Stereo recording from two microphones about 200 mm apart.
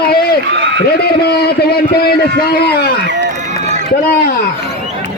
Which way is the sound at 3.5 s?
35° right (ahead or behind).